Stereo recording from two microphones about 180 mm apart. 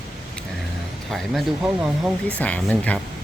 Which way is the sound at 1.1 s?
Centre (ahead or behind).